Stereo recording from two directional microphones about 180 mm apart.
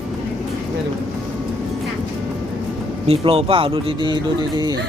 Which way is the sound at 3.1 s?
30° right (ahead or behind).